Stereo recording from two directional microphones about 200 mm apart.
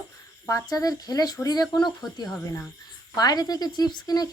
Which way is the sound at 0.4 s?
15° left (ahead or behind).